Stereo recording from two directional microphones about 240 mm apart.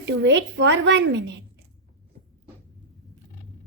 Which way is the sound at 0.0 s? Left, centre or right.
Right.